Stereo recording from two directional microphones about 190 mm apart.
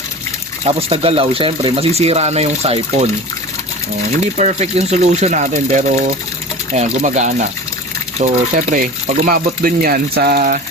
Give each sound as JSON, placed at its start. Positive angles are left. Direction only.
{"t": 0.6, "sound": "speech", "side_deg": -30}
{"t": 4.4, "sound": "speech", "side_deg": -35}